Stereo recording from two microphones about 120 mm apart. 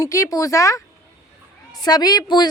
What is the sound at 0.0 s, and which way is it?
Speech, 30° left (ahead or behind).